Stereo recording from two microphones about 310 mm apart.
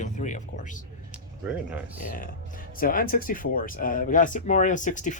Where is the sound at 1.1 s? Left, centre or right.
Centre.